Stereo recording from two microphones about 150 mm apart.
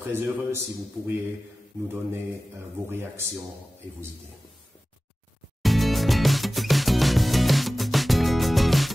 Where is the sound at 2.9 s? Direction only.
15° right (ahead or behind).